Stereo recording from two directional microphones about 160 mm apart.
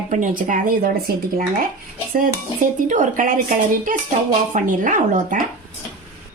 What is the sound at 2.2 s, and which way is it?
Speech, 55° right (ahead or behind).